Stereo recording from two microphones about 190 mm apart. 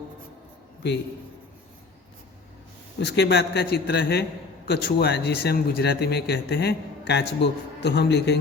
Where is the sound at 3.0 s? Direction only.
60° left (ahead or behind).